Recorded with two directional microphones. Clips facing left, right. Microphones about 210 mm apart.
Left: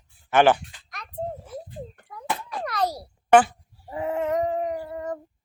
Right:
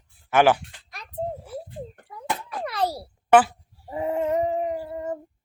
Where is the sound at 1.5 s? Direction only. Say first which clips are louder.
Right 2 dB; 30° right (ahead or behind).